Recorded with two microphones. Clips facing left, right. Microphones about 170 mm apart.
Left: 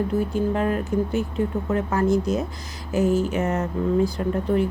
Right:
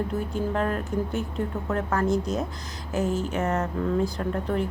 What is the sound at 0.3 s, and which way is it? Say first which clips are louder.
A woman's voice: left 1 dB; 5° left (ahead or behind).